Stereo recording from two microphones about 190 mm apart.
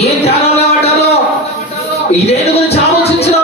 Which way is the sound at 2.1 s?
35° left (ahead or behind).